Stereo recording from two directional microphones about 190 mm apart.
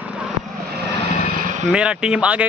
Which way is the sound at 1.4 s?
45° right (ahead or behind).